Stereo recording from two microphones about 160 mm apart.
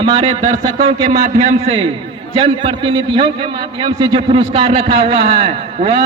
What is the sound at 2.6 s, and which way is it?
A man's voice, 30° right (ahead or behind).